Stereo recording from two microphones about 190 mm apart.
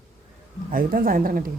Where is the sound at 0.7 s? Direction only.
50° right (ahead or behind).